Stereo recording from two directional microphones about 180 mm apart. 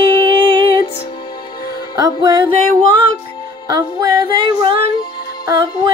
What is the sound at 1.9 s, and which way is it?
Music, 20° right (ahead or behind).